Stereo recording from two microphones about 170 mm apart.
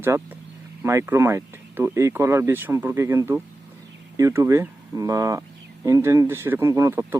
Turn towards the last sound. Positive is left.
turn(degrees=-15)  # may be behind; listen again after turning